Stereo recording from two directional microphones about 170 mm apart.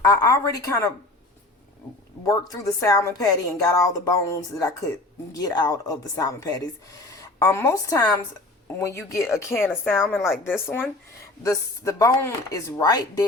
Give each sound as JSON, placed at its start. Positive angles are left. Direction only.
{"t": 0.0, "sound": "a woman's voice", "side_deg": 20}
{"t": 2.2, "sound": "a woman's voice", "side_deg": 20}
{"t": 10.2, "sound": "speech", "side_deg": 0}
{"t": 11.4, "sound": "a woman's voice", "side_deg": 20}